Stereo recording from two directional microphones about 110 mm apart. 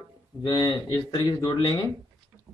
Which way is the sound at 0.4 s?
40° left (ahead or behind).